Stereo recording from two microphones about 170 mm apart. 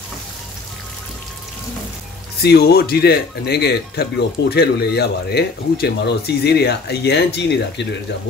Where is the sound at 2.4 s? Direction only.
70° left (ahead or behind); by 7.8 s 90° left.